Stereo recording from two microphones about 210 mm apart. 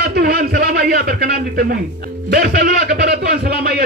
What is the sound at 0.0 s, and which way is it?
Speech, 50° right (ahead or behind).